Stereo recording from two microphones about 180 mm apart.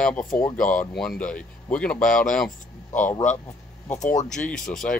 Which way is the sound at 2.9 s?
45° left (ahead or behind).